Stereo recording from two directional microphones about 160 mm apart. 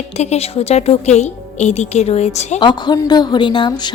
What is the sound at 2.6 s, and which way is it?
A woman's voice, 25° left (ahead or behind).